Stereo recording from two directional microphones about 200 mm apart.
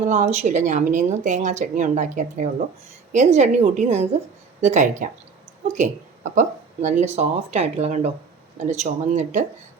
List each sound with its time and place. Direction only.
0.1 s speech: 35° right (ahead or behind)